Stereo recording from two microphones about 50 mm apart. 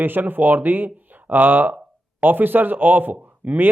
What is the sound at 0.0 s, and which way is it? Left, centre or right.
Speech, right.